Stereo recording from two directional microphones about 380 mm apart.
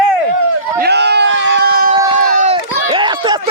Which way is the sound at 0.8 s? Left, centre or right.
Right.